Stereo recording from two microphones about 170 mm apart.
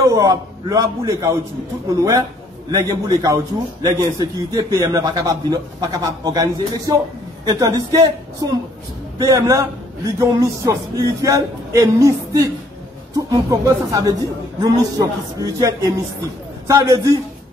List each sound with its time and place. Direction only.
0.0 s a man's voice: 20° right (ahead or behind)